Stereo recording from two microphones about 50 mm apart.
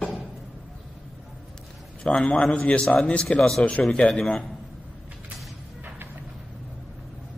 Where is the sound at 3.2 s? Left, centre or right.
Centre.